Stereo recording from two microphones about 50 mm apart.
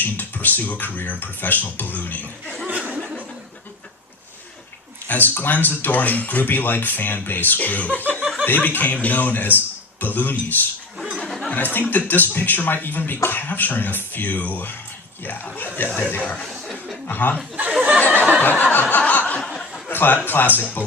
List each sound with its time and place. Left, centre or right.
0.0 s speech: left
2.6 s chuckle: right
5.0 s a man's voice: left
10.9 s chatter: centre
11.5 s speech: left
16.2 s speech: left
17.1 s speech: left
18.1 s a sound: right
18.4 s snicker: left
19.9 s a man's voice: left